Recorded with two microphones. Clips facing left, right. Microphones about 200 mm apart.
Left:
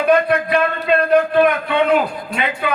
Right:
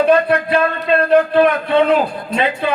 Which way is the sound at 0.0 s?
30° right (ahead or behind).